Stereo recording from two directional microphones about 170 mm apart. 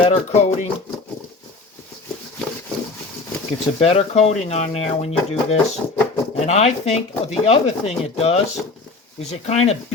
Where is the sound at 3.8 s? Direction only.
40° left (ahead or behind).